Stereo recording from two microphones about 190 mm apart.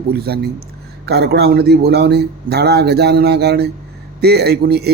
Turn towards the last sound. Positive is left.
turn(degrees=-60)  # may be behind; listen again after turning